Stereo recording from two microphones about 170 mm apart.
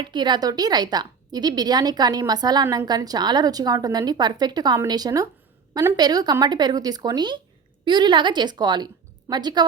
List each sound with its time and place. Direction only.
0.0 s a woman's voice: 25° right (ahead or behind)